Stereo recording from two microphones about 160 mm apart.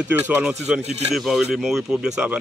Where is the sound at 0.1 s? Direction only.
10° right (ahead or behind).